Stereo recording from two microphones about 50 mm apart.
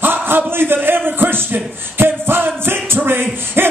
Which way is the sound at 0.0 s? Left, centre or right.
Right.